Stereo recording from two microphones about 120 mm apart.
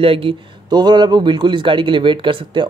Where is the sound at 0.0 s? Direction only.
50° right (ahead or behind).